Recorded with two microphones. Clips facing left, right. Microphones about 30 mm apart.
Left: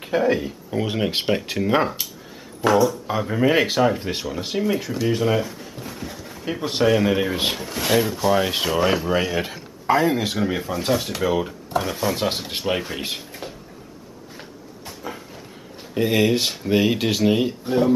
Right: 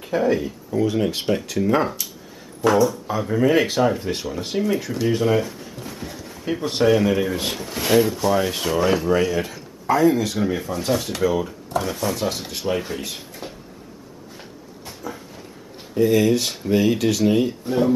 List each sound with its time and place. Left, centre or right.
0.2 s speech: centre
0.7 s speech: left
2.6 s speech: centre
3.1 s speech: left
7.1 s speech: left
7.5 s speech: centre; by 10.3 s left
10.3 s speech: centre
11.2 s speech: left
12.2 s speech: left
13.4 s cupboard open or close: centre
15.0 s a sound: left
15.9 s speech: left; by 17.9 s centre